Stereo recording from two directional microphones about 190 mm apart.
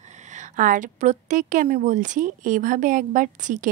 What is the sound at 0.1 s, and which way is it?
A woman's voice, 40° right (ahead or behind).